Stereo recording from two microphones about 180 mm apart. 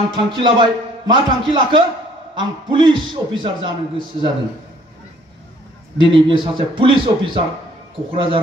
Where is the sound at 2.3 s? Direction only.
25° right (ahead or behind).